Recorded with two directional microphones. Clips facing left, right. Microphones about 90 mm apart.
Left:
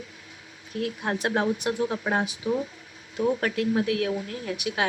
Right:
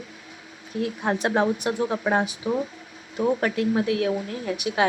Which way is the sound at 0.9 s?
30° right (ahead or behind).